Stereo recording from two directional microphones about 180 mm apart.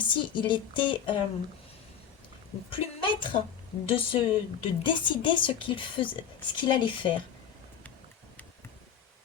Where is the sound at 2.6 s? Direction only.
30° left (ahead or behind).